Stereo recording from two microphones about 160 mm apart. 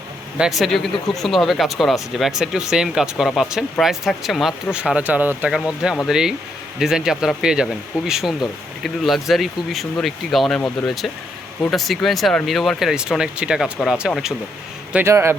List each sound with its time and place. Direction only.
0.3 s speech: centre (ahead or behind)
14.9 s speech: 15° right (ahead or behind)